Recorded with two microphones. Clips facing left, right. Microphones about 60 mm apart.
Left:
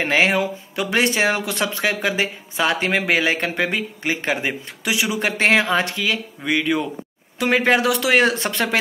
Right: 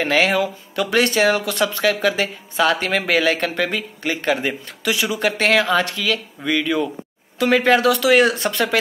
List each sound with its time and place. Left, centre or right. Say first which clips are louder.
0.0 s speech: right 1 dB; left